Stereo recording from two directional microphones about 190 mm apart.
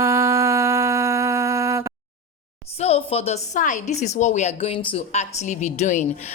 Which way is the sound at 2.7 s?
30° left (ahead or behind).